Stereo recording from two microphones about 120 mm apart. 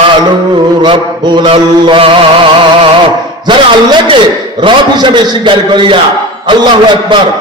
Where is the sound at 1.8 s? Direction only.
45° right (ahead or behind).